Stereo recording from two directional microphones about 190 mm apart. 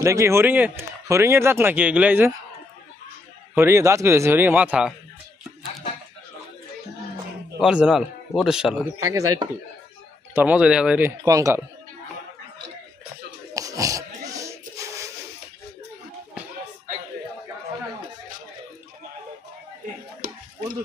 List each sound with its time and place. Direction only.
0.0 s speech: 15° right (ahead or behind)
3.5 s speech: 15° right (ahead or behind)
7.6 s speech: 5° right (ahead or behind)
9.0 s speech: 15° right (ahead or behind)
11.2 s speech: 15° right (ahead or behind)
13.5 s a sound: 15° right (ahead or behind)
20.2 s stir: 50° right (ahead or behind)